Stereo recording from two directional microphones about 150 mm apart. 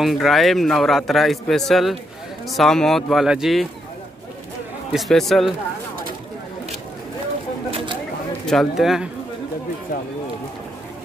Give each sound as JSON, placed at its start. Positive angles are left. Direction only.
{"t": 0.0, "sound": "a man's voice", "side_deg": 0}
{"t": 4.9, "sound": "a man's voice", "side_deg": 0}
{"t": 7.7, "sound": "single-lens reflex camera", "side_deg": -35}
{"t": 8.5, "sound": "a man's voice", "side_deg": 0}